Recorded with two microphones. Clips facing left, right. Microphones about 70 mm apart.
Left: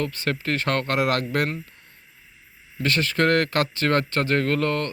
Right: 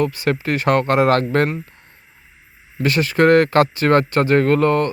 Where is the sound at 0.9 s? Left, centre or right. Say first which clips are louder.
Right 7 dB; right.